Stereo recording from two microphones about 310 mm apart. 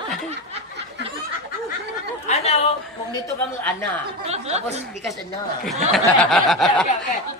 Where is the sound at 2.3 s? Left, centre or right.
Left.